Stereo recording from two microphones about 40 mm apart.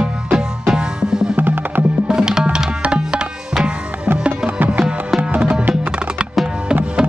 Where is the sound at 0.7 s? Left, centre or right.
Centre.